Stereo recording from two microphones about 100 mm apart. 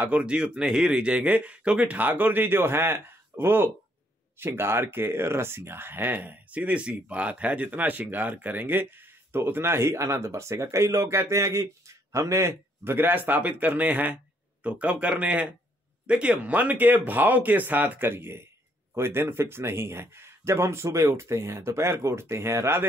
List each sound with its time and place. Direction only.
0.0 s speech: 10° right (ahead or behind)